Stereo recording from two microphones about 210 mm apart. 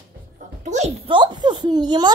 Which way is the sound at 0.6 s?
35° right (ahead or behind).